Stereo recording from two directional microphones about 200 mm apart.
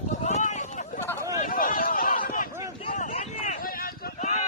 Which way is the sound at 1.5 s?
45° left (ahead or behind).